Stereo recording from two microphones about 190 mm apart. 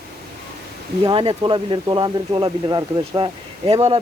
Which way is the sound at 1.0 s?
25° right (ahead or behind).